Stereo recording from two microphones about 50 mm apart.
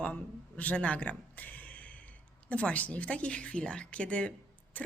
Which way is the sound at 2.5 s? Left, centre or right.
Left.